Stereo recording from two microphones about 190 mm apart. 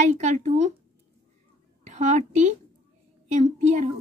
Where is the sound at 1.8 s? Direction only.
40° right (ahead or behind).